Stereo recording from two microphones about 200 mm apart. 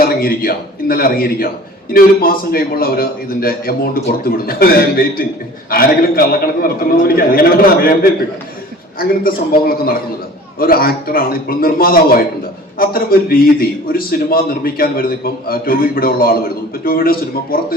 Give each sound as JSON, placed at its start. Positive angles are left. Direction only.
{"t": 0.0, "sound": "a man's voice", "side_deg": 50}
{"t": 9.0, "sound": "a man's voice", "side_deg": 45}